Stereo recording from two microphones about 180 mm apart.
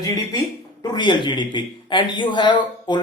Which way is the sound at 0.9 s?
25° left (ahead or behind).